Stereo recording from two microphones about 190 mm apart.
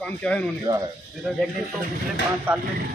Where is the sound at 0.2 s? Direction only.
5° left (ahead or behind).